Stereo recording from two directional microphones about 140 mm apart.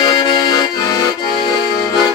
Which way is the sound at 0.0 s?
25° left (ahead or behind).